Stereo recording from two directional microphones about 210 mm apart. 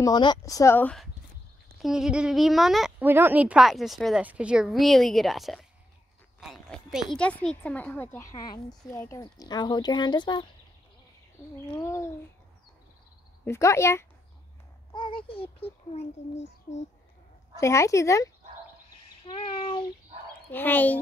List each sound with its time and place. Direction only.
0.0 s a woman's voice: 20° left (ahead or behind); by 5.7 s centre (ahead or behind)
6.4 s a sound: centre (ahead or behind)
7.2 s a woman's voice: 5° left (ahead or behind); by 10.4 s 20° left (ahead or behind)
11.7 s a woman's voice: 15° left (ahead or behind)
13.5 s a woman's voice: 15° left (ahead or behind); by 16.8 s 30° left (ahead or behind)
17.6 s a woman's voice: 15° left (ahead or behind)
20.5 s a woman's voice: 10° left (ahead or behind)